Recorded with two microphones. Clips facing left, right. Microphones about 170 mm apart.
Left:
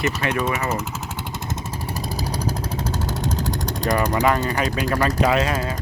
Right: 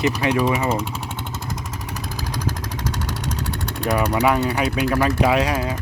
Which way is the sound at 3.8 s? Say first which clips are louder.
Right 1 dB; 10° right (ahead or behind).